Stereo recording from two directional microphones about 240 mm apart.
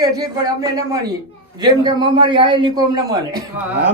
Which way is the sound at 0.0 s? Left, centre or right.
Centre.